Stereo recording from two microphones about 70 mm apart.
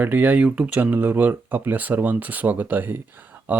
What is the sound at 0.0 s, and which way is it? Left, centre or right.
Speech, right.